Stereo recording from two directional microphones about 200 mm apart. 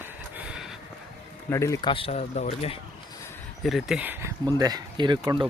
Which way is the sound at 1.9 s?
30° left (ahead or behind).